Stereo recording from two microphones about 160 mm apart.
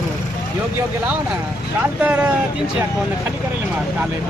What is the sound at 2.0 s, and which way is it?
Speech, 10° right (ahead or behind).